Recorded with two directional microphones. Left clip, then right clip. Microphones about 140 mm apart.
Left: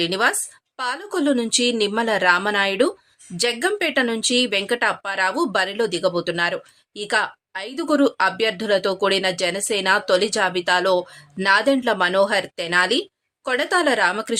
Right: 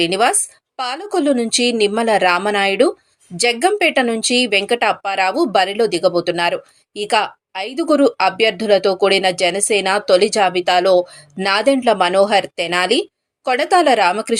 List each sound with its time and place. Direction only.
0.0 s speech: 15° right (ahead or behind)